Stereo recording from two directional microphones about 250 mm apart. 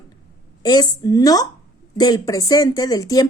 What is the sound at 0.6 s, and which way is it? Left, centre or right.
A woman's voice, centre.